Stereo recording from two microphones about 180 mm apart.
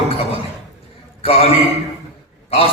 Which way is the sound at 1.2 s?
30° left (ahead or behind).